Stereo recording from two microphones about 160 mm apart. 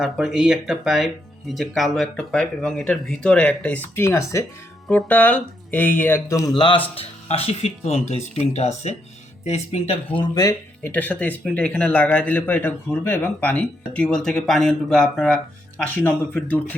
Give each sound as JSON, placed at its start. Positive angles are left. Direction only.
{"t": 0.0, "sound": "a man's voice", "side_deg": -5}
{"t": 6.5, "sound": "speech", "side_deg": 30}
{"t": 10.2, "sound": "speech", "side_deg": 25}
{"t": 10.8, "sound": "a man's voice", "side_deg": 10}